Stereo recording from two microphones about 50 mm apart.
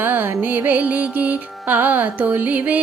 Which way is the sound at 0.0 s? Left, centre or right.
Right.